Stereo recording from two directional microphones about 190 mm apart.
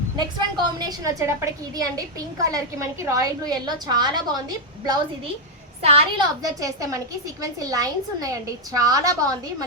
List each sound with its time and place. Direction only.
0.3 s a woman's voice: 20° right (ahead or behind)
6.4 s a woman's voice: 15° right (ahead or behind)